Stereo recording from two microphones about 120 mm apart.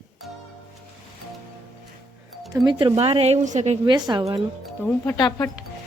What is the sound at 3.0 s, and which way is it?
Speech, 55° right (ahead or behind).